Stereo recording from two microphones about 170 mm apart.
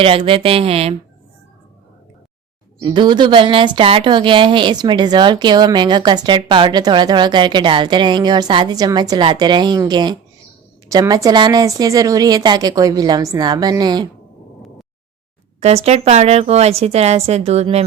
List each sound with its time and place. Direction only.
0.0 s a woman's voice: 35° right (ahead or behind)
2.8 s a woman's voice: 25° right (ahead or behind)
15.6 s a woman's voice: 40° right (ahead or behind)